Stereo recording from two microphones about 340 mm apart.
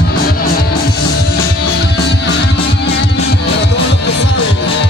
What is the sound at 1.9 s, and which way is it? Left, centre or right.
Music, left.